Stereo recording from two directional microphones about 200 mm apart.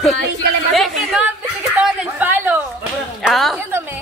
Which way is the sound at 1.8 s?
5° right (ahead or behind).